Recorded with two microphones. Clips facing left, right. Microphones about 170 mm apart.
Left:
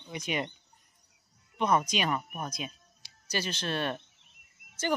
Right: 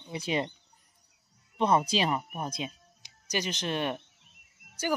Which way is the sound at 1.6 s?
30° right (ahead or behind).